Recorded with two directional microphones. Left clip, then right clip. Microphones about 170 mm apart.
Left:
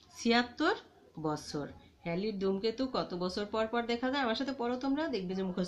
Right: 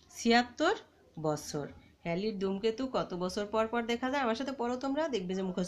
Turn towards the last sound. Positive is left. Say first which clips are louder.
# right 1 dB
turn(degrees=-45)  # may be behind; listen again after turning